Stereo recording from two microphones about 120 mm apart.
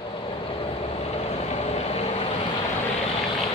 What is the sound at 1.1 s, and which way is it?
Vehicle, 65° left (ahead or behind).